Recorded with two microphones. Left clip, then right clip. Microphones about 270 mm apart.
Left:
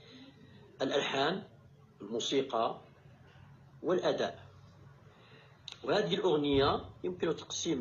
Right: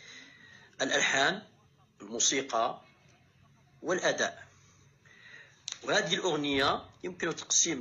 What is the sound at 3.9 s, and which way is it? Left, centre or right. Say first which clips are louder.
Speech: right 2 dB; right.